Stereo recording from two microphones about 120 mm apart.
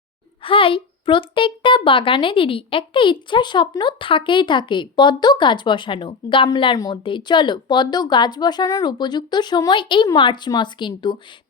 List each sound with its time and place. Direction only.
0.4 s a child's voice: 50° left (ahead or behind)